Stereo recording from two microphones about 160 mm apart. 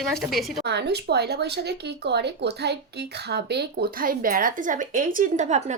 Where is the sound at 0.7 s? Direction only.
90° right.